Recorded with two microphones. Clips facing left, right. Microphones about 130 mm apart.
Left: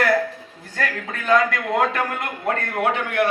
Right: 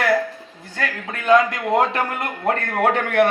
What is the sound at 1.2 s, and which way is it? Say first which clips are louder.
Speech: right 3 dB; 20° right (ahead or behind).